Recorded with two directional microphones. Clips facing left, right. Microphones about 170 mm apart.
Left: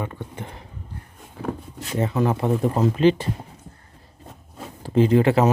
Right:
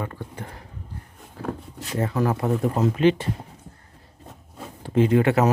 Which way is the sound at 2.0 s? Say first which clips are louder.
Left 2 dB; 20° left (ahead or behind).